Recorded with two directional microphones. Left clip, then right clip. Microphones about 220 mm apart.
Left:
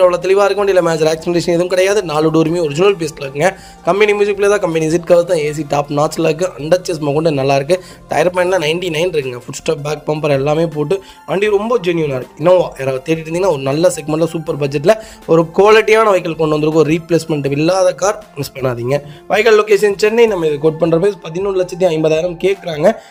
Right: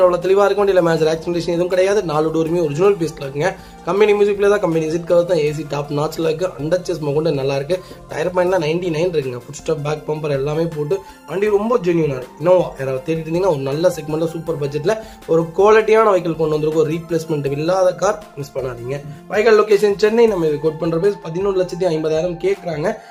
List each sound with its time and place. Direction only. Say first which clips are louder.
0.0 s a man's voice: left 3 dB; 30° left (ahead or behind)